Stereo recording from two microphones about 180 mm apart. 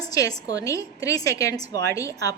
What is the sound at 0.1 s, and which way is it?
A woman's voice, 20° left (ahead or behind).